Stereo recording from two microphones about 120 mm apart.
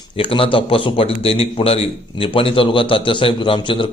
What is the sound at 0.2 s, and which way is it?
Speech, 50° left (ahead or behind).